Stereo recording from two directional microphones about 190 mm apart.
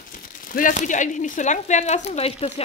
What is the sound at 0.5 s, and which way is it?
Speech, 45° left (ahead or behind).